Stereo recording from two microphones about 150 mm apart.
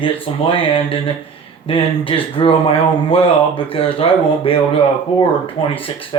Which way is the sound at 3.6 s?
40° left (ahead or behind).